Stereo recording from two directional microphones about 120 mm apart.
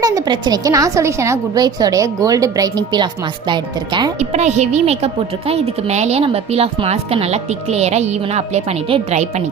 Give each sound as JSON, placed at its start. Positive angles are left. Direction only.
{"t": 0.0, "sound": "a woman's voice", "side_deg": -35}
{"t": 4.2, "sound": "a woman's voice", "side_deg": -70}